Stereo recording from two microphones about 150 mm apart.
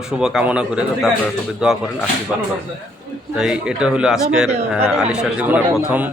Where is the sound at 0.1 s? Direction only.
5° right (ahead or behind).